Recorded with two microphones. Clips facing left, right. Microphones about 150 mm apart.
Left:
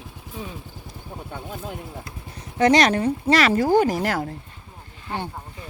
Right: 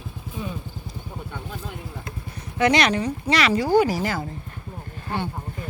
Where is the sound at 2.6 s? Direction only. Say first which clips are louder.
Left 3 dB; 40° left (ahead or behind).